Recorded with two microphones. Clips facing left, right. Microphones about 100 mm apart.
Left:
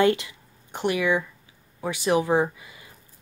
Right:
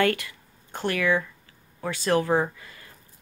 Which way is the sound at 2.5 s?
15° left (ahead or behind).